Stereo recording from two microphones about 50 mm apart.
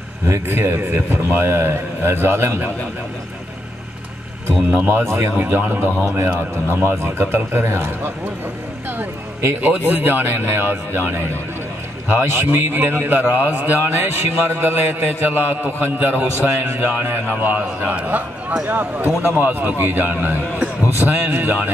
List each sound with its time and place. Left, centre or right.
0.3 s a man's voice: right
4.6 s a man's voice: right
9.6 s a man's voice: right
20.6 s a sound: right
21.3 s a man's voice: right